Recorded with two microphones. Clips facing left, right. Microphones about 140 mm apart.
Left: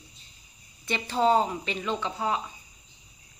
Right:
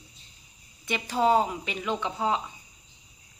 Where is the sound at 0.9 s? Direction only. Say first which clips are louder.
Even; 10° right (ahead or behind).